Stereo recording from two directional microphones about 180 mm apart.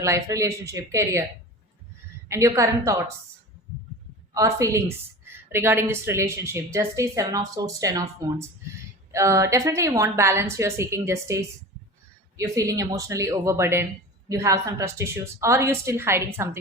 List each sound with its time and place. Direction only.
0.0 s a woman's voice: 15° right (ahead or behind)
2.3 s a woman's voice: 15° right (ahead or behind)
4.4 s a woman's voice: 15° right (ahead or behind)